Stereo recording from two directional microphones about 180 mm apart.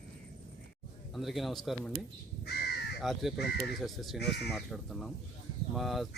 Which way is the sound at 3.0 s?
Centre (ahead or behind).